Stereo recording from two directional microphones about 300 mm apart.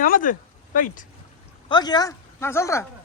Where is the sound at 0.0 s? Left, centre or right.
Left.